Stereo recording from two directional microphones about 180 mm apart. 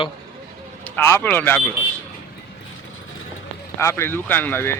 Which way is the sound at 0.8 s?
15° left (ahead or behind).